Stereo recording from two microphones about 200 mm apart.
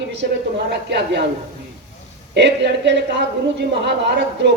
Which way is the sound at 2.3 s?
60° right (ahead or behind).